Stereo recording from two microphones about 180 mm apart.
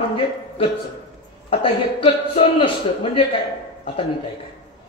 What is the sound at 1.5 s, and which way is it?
A man's voice, 30° left (ahead or behind).